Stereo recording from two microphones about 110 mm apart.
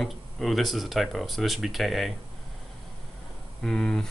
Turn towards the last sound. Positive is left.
turn(degrees=5)  # may be behind; listen again after turning